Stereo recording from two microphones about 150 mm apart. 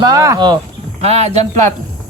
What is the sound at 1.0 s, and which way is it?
Speech, 45° right (ahead or behind).